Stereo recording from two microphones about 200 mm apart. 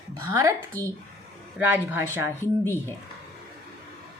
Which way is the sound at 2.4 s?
10° left (ahead or behind).